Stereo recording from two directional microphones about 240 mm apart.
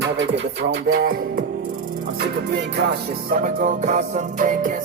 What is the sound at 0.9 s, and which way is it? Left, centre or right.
Music, right.